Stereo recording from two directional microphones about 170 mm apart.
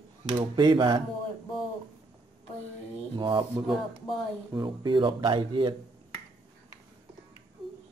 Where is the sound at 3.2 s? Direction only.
30° right (ahead or behind).